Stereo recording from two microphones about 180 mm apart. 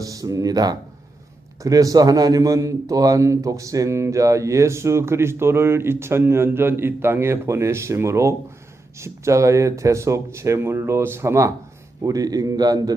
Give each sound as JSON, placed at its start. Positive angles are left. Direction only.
{"t": 0.0, "sound": "a man's voice", "side_deg": -20}